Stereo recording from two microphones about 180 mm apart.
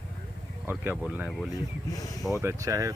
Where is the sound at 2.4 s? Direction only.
15° right (ahead or behind).